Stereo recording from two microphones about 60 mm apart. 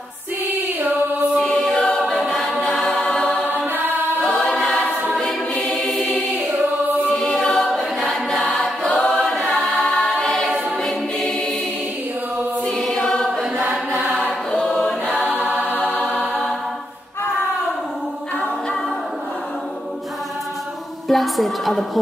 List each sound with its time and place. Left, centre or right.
1.3 s choir: centre
3.5 s choir: right
4.3 s choir: centre
5.7 s music: centre
7.1 s choir: centre
12.6 s choir: centre
13.7 s chant: centre
14.5 s choir: centre
15.6 s music: left
16.0 s music: centre
21.1 s a sound: centre